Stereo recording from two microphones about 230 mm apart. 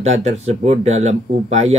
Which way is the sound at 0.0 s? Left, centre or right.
Right.